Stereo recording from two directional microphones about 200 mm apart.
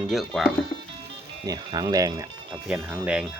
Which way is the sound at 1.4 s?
20° right (ahead or behind).